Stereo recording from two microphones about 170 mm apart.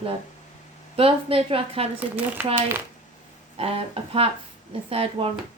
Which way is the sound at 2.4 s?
10° right (ahead or behind).